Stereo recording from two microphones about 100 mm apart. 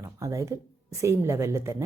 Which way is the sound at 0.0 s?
30° right (ahead or behind).